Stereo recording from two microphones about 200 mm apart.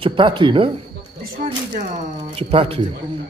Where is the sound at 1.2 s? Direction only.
45° right (ahead or behind).